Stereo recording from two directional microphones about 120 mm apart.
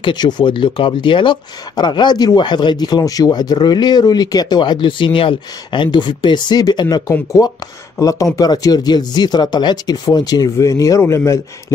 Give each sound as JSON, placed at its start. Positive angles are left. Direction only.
{"t": 0.0, "sound": "speech", "side_deg": 35}